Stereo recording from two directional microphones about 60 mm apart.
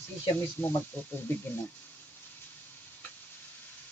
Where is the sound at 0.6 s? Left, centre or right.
Left.